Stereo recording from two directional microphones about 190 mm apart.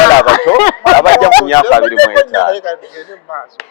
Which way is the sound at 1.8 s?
10° left (ahead or behind).